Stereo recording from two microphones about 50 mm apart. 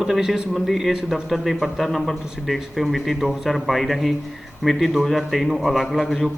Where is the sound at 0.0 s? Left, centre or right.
Centre.